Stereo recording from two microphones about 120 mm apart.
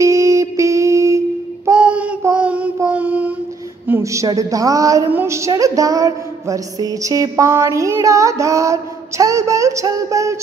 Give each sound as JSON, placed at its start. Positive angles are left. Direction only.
{"t": 0.0, "sound": "a sound", "side_deg": -25}
{"t": 1.8, "sound": "child singing", "side_deg": -10}
{"t": 3.8, "sound": "music", "side_deg": -20}